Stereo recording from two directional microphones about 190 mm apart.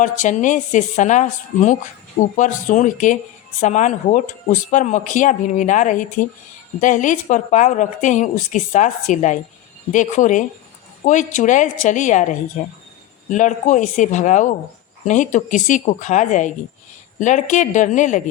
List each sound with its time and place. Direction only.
0.0 s speech: 40° left (ahead or behind)